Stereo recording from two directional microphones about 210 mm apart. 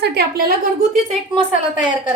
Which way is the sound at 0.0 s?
55° right (ahead or behind).